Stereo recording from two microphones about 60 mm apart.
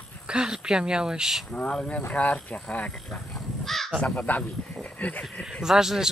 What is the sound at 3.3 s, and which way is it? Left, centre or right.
Crow, centre.